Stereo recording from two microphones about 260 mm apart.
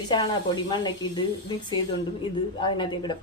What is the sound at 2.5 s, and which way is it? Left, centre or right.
Speech, centre.